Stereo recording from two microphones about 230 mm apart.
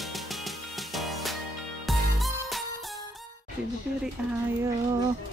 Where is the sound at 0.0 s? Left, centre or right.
Centre.